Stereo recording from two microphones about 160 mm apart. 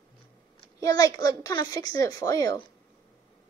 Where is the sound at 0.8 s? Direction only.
20° left (ahead or behind).